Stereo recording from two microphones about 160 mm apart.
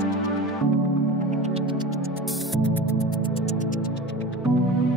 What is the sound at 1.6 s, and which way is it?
Music, 30° right (ahead or behind).